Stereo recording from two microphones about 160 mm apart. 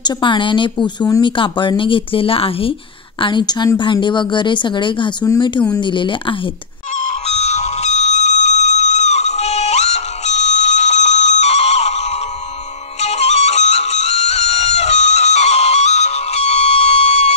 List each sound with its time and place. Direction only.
0.0 s a woman's voice: 30° left (ahead or behind)
5.2 s a woman's voice: 20° left (ahead or behind)
5.7 s speech: 30° left (ahead or behind)
7.2 s fire alarm: 40° left (ahead or behind)
13.0 s music: 45° left (ahead or behind)